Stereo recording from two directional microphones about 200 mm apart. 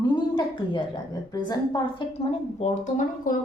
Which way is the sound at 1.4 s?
20° left (ahead or behind).